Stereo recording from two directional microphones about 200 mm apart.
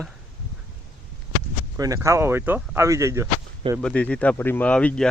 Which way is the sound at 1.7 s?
15° right (ahead or behind).